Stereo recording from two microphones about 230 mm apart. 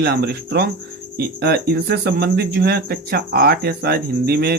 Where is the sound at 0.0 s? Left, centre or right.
Right.